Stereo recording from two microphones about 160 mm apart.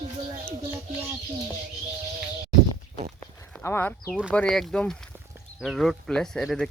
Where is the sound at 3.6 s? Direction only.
15° left (ahead or behind).